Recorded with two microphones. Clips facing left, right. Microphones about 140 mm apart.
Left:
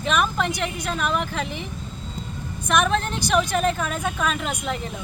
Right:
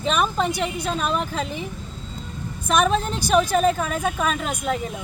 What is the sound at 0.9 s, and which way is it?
Speech, 35° right (ahead or behind).